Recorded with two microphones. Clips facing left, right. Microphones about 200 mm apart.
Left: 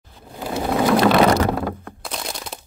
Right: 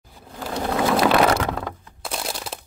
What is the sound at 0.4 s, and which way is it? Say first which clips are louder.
Sewing machine: left 2 dB; 5° left (ahead or behind).